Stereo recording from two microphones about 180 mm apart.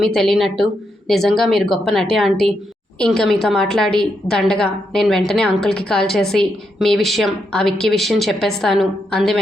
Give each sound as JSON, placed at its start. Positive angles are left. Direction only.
{"t": 0.0, "sound": "a woman's voice", "side_deg": 0}